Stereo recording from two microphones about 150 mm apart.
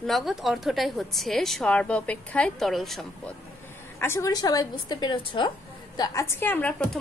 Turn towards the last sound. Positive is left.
turn(degrees=10)  # may be behind; listen again after turning